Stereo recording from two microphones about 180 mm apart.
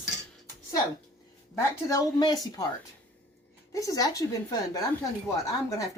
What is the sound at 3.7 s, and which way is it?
Speech, 20° left (ahead or behind).